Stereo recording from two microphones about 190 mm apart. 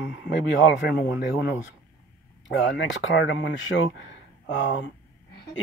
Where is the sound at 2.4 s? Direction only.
75° left (ahead or behind).